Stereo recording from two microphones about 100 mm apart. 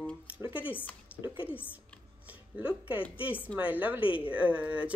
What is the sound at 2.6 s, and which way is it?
Speech, 15° right (ahead or behind).